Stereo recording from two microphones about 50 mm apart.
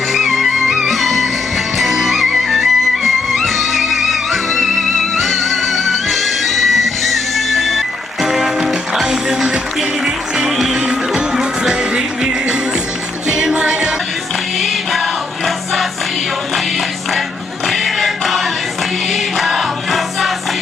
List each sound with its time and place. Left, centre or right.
0.1 s music: centre; by 13.9 s right
14.6 s music: centre
17.7 s choir: centre